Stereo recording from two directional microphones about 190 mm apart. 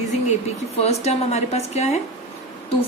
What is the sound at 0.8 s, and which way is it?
A woman's voice, 35° left (ahead or behind).